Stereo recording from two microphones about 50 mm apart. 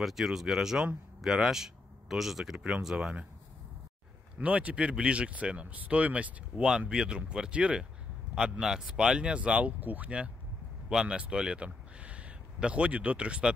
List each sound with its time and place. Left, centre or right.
0.0 s speech: centre
4.4 s speech: right
6.9 s speech: centre
10.9 s speech: centre